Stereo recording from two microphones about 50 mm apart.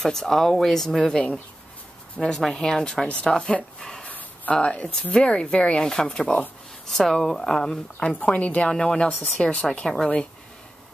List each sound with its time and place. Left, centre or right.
0.0 s speech: centre
3.8 s a sound: centre
4.1 s a sound: left
5.1 s speech: left
8.4 s speech: left
8.6 s speech: centre